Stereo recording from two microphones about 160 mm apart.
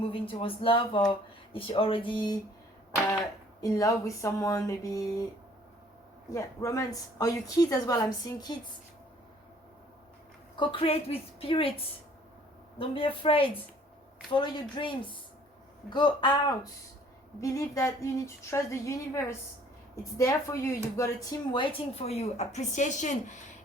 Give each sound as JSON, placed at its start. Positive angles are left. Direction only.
{"t": 0.0, "sound": "speech", "side_deg": 35}
{"t": 3.6, "sound": "a woman's voice", "side_deg": 20}
{"t": 6.3, "sound": "a woman's voice", "side_deg": 20}
{"t": 10.6, "sound": "speech", "side_deg": 35}
{"t": 12.8, "sound": "a woman's voice", "side_deg": 35}